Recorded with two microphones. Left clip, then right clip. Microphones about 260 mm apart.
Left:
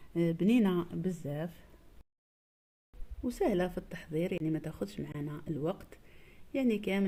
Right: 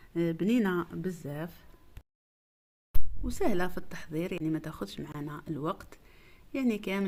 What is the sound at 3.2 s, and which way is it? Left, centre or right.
A woman's voice, centre.